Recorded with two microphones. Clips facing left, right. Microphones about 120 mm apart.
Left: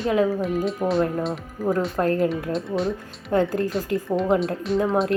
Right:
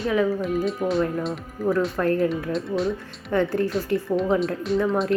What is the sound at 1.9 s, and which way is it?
Speech, 30° left (ahead or behind).